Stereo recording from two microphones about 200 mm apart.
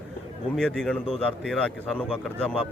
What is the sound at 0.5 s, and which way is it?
Speech, 5° left (ahead or behind).